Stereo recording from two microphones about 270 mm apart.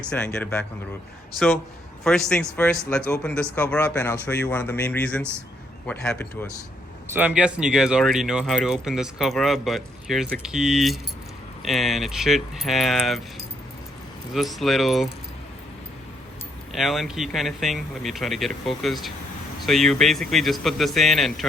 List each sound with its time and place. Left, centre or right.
0.1 s speech: centre
2.0 s speech: centre
7.1 s speech: centre
14.3 s speech: centre
16.7 s speech: centre